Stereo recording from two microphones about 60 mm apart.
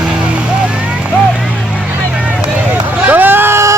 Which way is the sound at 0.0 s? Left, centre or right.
Centre.